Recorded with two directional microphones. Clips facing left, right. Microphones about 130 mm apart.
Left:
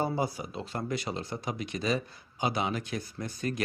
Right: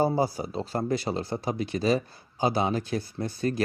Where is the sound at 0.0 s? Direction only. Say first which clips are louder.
Right 6 dB; 35° right (ahead or behind).